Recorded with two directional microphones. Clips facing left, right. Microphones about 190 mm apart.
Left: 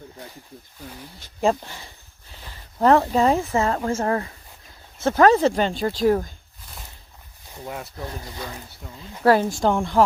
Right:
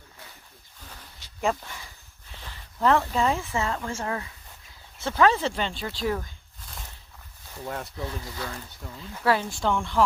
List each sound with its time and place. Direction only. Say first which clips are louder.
1.4 s speech: left 6 dB; 30° left (ahead or behind)
7.4 s speech: left 1 dB; 10° left (ahead or behind)
9.2 s speech: left 7 dB; 45° left (ahead or behind)